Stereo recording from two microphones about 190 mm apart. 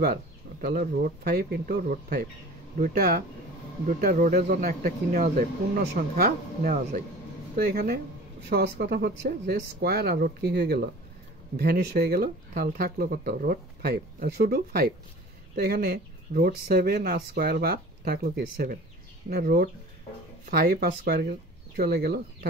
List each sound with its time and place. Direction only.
0.0 s speech: 50° right (ahead or behind)